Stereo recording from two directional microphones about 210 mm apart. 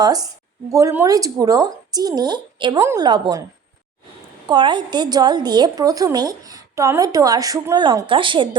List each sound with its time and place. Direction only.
0.0 s speech: 20° right (ahead or behind)
4.4 s a woman's voice: 20° right (ahead or behind)